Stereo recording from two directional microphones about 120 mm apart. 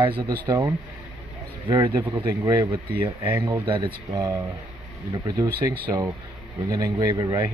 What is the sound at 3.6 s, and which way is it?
Speech, 45° right (ahead or behind).